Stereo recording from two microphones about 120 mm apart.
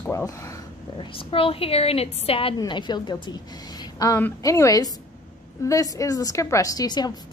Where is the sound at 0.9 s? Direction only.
50° left (ahead or behind).